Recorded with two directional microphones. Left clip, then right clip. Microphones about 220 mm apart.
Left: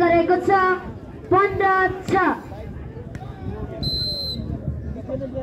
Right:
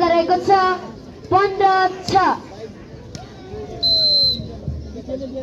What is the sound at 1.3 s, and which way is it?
Speech, 50° left (ahead or behind).